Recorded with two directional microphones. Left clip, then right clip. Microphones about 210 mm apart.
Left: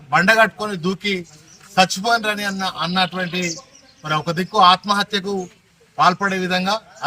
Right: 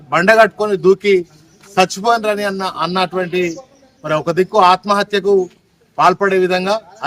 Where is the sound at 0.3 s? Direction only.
20° right (ahead or behind).